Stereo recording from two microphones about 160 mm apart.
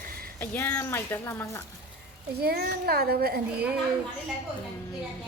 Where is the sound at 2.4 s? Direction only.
75° right (ahead or behind).